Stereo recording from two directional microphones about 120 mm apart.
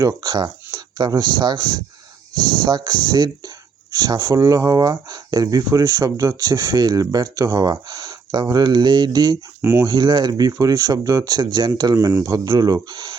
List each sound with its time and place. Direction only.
0.0 s speech: 35° right (ahead or behind)
9.6 s speech: 20° right (ahead or behind)
9.8 s speech: 40° right (ahead or behind)
11.9 s speech: 25° right (ahead or behind)